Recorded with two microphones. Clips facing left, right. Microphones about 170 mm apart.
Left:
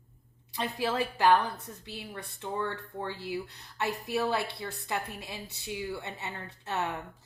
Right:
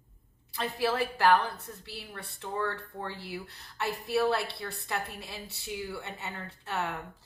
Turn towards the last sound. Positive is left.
turn(degrees=20)  # may be behind; listen again after turning